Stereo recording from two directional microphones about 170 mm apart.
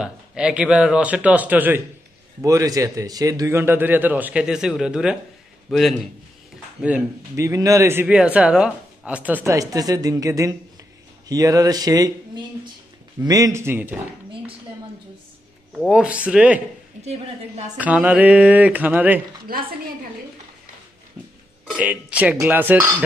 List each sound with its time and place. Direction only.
0.0 s a man's voice: 5° right (ahead or behind)
6.8 s a man's voice: 15° right (ahead or behind)
13.2 s a man's voice: 20° right (ahead or behind)
15.8 s a man's voice: 5° right (ahead or behind)
17.0 s a woman's voice: 40° right (ahead or behind)
17.7 s a man's voice: 10° right (ahead or behind)
19.5 s a woman's voice: 60° right (ahead or behind)
21.6 s a man's voice: 10° right (ahead or behind)